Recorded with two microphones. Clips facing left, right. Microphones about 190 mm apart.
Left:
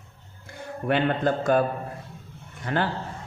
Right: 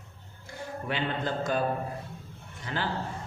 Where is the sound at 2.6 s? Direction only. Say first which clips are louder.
Left 7 dB; 55° left (ahead or behind).